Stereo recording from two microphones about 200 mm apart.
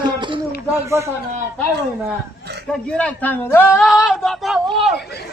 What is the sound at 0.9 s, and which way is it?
Speech, 15° right (ahead or behind).